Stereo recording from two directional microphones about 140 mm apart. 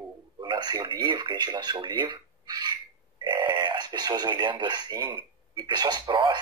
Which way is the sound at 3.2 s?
35° right (ahead or behind).